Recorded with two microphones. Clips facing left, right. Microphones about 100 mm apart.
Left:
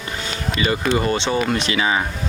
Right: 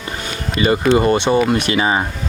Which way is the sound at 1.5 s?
55° right (ahead or behind).